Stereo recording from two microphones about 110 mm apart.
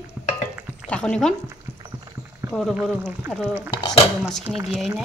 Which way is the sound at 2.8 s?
5° left (ahead or behind).